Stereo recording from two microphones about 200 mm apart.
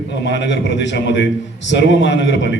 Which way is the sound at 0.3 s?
60° left (ahead or behind).